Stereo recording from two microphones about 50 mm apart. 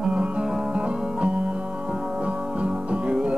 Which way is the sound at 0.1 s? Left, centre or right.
Centre.